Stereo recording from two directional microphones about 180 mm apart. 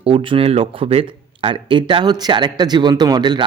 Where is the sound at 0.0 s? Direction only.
30° right (ahead or behind).